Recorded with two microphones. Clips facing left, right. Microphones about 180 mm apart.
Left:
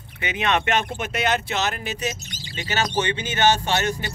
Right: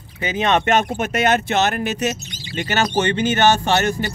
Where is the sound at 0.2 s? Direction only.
35° right (ahead or behind).